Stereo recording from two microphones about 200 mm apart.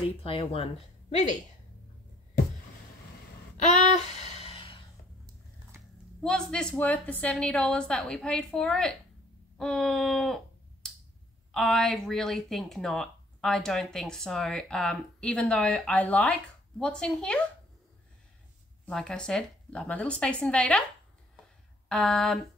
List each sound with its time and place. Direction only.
0.2 s a woman's voice: 30° left (ahead or behind)
3.6 s a sound: 35° left (ahead or behind)
6.2 s speech: 5° left (ahead or behind)
9.6 s a sound: centre (ahead or behind)
11.5 s speech: centre (ahead or behind)
18.9 s speech: 5° left (ahead or behind)
21.8 s speech: centre (ahead or behind)